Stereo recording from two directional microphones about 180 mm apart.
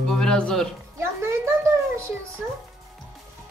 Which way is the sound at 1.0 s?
15° right (ahead or behind).